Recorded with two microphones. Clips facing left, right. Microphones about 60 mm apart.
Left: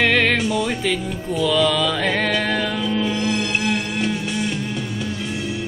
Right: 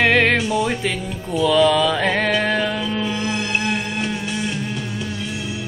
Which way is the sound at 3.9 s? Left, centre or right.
Centre.